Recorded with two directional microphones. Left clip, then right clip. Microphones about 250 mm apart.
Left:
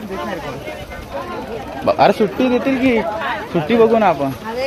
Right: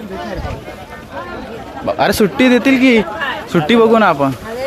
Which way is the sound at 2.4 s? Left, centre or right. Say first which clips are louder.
Right 5 dB; right.